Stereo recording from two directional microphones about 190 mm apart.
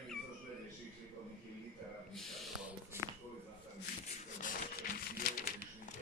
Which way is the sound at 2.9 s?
15° right (ahead or behind).